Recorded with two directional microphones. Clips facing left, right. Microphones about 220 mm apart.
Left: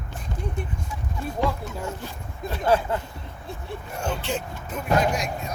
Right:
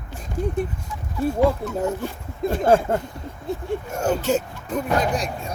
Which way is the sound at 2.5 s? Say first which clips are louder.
Right 4 dB; 50° right (ahead or behind).